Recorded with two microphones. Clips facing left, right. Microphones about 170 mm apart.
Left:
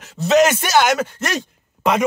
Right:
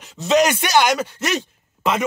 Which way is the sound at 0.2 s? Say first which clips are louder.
Left 2 dB; 5° left (ahead or behind).